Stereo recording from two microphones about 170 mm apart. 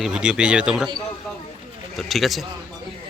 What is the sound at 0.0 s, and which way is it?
Speech, 5° right (ahead or behind).